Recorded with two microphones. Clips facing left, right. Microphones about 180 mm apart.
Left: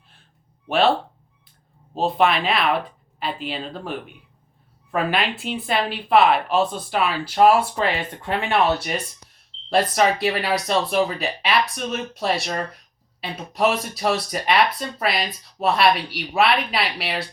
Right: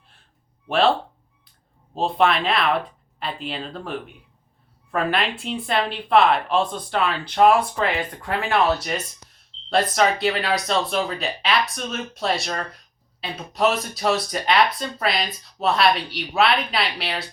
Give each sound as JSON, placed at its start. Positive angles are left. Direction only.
{"t": 0.7, "sound": "speech", "side_deg": 0}
{"t": 2.0, "sound": "speech", "side_deg": 0}
{"t": 8.2, "sound": "speech", "side_deg": 25}
{"t": 9.6, "sound": "speech", "side_deg": 10}